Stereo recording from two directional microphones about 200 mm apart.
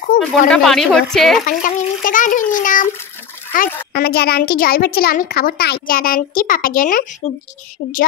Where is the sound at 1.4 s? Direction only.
40° left (ahead or behind).